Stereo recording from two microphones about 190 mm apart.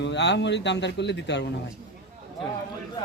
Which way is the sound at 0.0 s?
65° left (ahead or behind).